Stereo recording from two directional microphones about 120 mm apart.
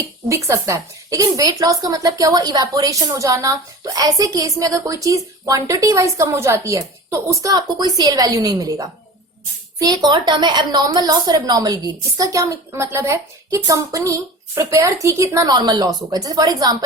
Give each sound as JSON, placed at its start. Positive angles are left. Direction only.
{"t": 0.3, "sound": "a woman's voice", "side_deg": -25}